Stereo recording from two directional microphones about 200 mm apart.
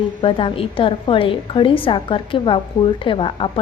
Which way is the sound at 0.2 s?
25° left (ahead or behind).